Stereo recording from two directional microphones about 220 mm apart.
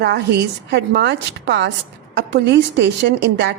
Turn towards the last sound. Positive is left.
turn(degrees=-50)  # may be behind; listen again after turning